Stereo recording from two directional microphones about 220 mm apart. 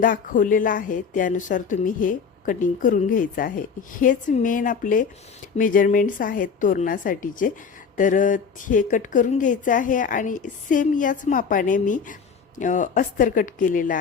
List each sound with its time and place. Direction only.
0.0 s a woman's voice: 35° left (ahead or behind)